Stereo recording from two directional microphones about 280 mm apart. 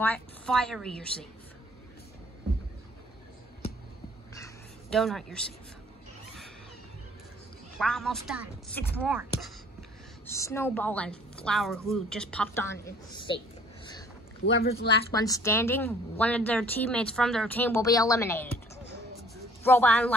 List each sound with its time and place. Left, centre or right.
0.0 s speech: centre
4.3 s a sound: centre
4.9 s speech: centre
7.8 s speech: centre
10.3 s a woman's voice: centre
14.4 s speech: left
15.1 s a woman's voice: centre
19.6 s speech: centre